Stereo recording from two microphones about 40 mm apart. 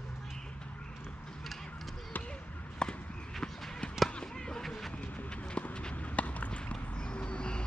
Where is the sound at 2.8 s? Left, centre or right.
Left.